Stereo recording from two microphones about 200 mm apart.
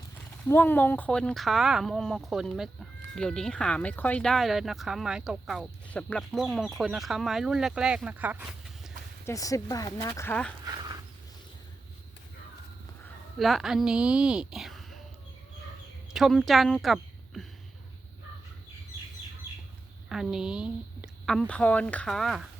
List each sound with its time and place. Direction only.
0.4 s speech: 10° left (ahead or behind); by 8.9 s 5° right (ahead or behind)
9.2 s speech: 15° left (ahead or behind)
13.4 s speech: centre (ahead or behind)
16.1 s a woman's voice: centre (ahead or behind)
20.1 s speech: centre (ahead or behind)